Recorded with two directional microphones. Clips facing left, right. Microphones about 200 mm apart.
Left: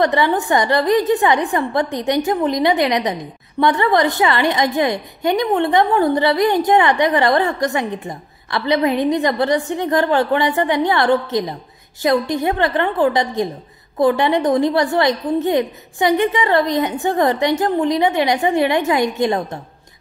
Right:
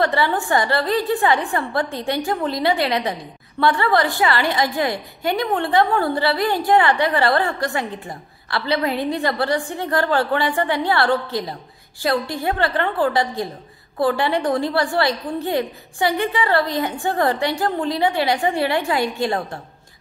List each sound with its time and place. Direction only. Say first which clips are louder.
0.0 s a woman's voice: left 3 dB; 20° left (ahead or behind)